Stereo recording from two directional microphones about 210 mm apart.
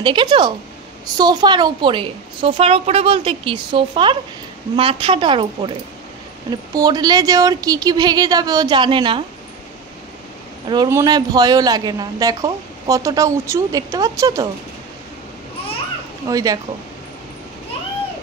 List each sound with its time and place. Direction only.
0.0 s a woman's voice: 20° right (ahead or behind)
10.7 s a woman's voice: 15° right (ahead or behind)
16.3 s a woman's voice: 15° right (ahead or behind)